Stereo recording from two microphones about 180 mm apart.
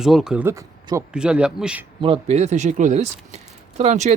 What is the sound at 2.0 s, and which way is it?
Speech, 35° right (ahead or behind).